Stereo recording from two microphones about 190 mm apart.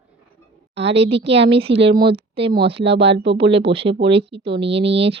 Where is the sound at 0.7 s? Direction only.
30° right (ahead or behind).